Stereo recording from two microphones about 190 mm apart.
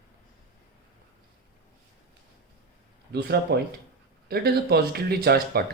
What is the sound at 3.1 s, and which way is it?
Speech, 60° right (ahead or behind).